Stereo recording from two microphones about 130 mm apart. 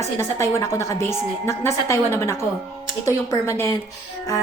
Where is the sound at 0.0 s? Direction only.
20° left (ahead or behind).